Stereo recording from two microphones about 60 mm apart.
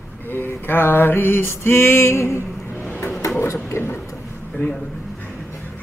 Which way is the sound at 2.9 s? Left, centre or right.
Left.